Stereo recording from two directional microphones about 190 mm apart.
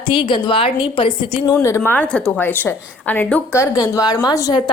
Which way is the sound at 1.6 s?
10° left (ahead or behind).